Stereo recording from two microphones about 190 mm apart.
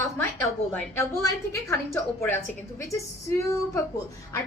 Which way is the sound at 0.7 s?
10° left (ahead or behind).